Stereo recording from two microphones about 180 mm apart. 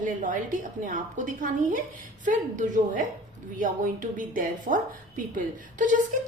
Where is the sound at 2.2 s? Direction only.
45° right (ahead or behind).